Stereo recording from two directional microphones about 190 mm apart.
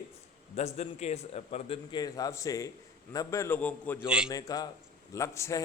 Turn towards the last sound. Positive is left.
turn(degrees=15)  # may be behind; listen again after turning